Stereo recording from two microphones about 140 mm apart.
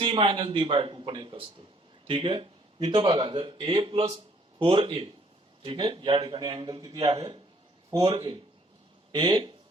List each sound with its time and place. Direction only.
0.0 s speech: 40° right (ahead or behind)
7.1 s speech: 40° right (ahead or behind)